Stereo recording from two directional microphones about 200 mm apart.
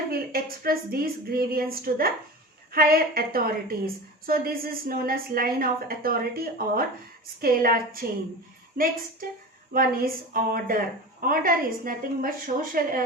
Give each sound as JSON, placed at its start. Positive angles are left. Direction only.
{"t": 0.1, "sound": "a woman's voice", "side_deg": -45}